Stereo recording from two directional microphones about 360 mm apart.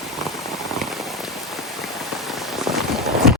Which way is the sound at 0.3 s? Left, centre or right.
Centre.